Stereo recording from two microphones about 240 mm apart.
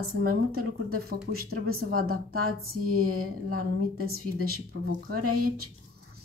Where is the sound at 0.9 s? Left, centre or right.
Right.